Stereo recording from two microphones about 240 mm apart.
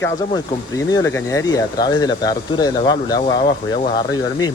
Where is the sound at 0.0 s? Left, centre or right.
Centre.